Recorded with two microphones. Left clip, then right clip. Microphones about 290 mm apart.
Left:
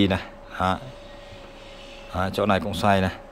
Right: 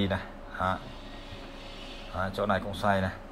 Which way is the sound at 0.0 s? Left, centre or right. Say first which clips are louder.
Left 8 dB; left.